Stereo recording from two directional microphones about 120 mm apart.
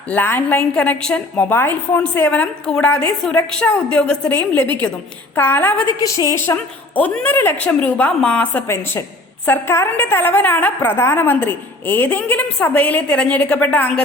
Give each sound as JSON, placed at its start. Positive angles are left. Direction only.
{"t": 0.1, "sound": "a woman's voice", "side_deg": 15}
{"t": 8.6, "sound": "a woman's voice", "side_deg": 20}